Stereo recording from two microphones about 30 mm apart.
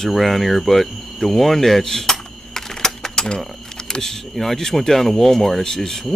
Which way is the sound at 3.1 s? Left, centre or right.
Left.